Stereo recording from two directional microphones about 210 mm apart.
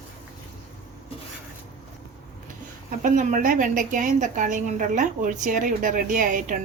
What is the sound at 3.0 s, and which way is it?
A woman's voice, 40° right (ahead or behind).